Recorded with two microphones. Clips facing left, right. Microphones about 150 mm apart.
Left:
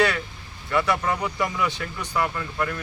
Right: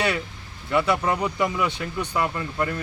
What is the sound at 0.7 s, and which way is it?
Speech, 20° right (ahead or behind).